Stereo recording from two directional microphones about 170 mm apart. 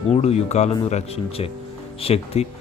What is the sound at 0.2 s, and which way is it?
A man's voice, 40° left (ahead or behind).